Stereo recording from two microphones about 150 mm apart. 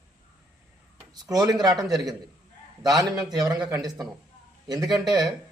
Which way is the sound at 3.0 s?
25° right (ahead or behind).